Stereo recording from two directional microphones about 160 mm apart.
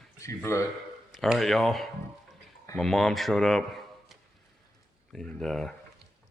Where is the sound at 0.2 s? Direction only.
20° left (ahead or behind).